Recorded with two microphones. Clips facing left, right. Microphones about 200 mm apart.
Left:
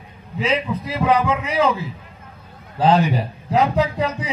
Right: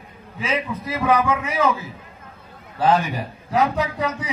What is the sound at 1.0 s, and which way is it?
Speech, 25° left (ahead or behind).